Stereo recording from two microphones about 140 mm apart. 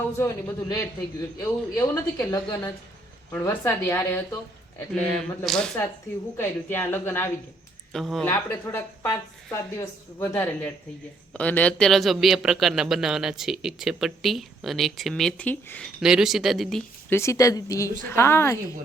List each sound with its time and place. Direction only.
0.2 s a woman's voice: 20° left (ahead or behind)
4.9 s a man's voice: 5° left (ahead or behind)
6.3 s a woman's voice: 15° left (ahead or behind)
7.9 s a man's voice: centre (ahead or behind)
8.2 s a woman's voice: 15° left (ahead or behind)
16.0 s a man's voice: 5° right (ahead or behind)
17.1 s a woman's voice: 20° left (ahead or behind)